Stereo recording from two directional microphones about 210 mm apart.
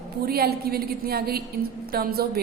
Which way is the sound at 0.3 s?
45° right (ahead or behind).